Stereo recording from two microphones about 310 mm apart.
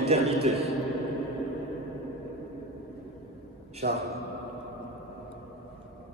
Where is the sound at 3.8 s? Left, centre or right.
Right.